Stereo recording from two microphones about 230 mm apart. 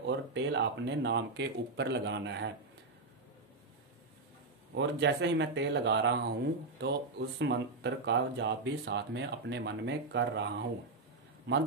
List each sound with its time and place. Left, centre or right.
0.0 s speech: right
4.7 s speech: right